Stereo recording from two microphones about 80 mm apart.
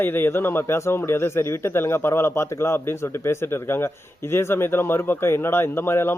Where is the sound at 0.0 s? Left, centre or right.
Left.